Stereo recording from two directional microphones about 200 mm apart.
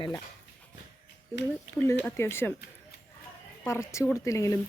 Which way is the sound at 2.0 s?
10° left (ahead or behind).